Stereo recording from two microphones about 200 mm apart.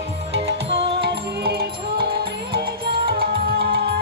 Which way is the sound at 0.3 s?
60° right (ahead or behind).